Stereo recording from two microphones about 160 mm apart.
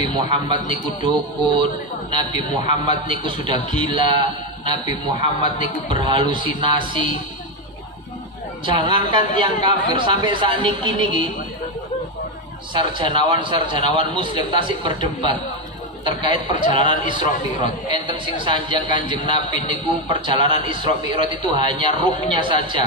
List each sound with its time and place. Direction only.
0.0 s a man's voice: 30° right (ahead or behind)
8.6 s a man's voice: 30° right (ahead or behind)
12.7 s a man's voice: 30° right (ahead or behind)